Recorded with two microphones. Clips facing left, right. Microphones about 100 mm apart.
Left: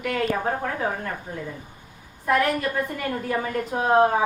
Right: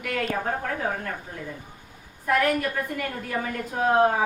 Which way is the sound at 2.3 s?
20° left (ahead or behind).